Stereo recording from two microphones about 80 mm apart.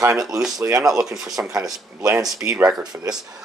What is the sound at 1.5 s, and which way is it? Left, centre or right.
Speech, right.